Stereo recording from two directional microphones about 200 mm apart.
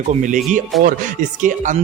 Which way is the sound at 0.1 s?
40° right (ahead or behind).